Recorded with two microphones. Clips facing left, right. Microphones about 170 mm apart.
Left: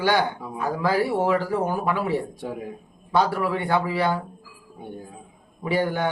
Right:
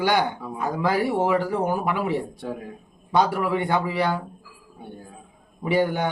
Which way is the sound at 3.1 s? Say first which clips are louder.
Right 1 dB; 15° right (ahead or behind).